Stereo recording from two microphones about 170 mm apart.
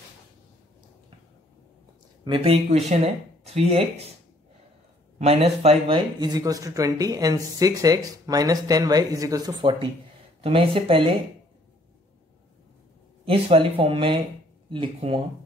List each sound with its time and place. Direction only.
2.2 s speech: 30° right (ahead or behind)
5.2 s speech: 35° right (ahead or behind)
13.2 s speech: 35° right (ahead or behind)